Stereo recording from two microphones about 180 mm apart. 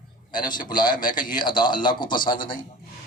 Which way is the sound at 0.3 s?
50° left (ahead or behind).